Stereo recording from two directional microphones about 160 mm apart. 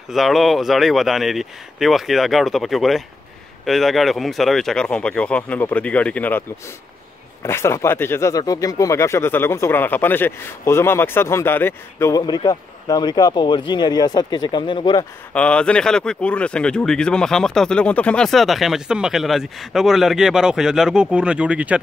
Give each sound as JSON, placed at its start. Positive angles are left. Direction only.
{"t": 0.1, "sound": "speech", "side_deg": 0}
{"t": 7.4, "sound": "speech", "side_deg": 15}
{"t": 12.2, "sound": "a man's voice", "side_deg": 25}
{"t": 15.3, "sound": "speech", "side_deg": 5}